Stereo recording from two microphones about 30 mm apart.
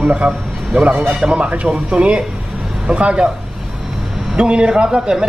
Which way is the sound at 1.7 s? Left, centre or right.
Right.